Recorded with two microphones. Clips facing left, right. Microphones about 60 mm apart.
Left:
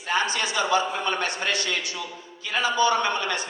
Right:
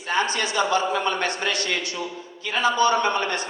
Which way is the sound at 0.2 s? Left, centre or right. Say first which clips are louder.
Right 4 dB; right.